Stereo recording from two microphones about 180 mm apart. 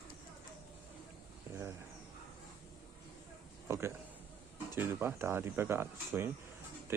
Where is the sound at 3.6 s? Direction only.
15° right (ahead or behind).